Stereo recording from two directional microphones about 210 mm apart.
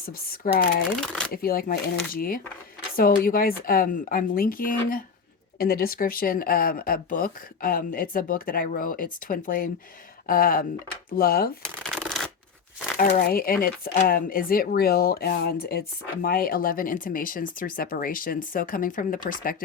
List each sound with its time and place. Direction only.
0.0 s speech: 45° left (ahead or behind)
1.0 s speech: 5° left (ahead or behind)
1.3 s speech: 45° left (ahead or behind)
11.6 s shuffling cards: centre (ahead or behind)
13.0 s speech: 45° left (ahead or behind)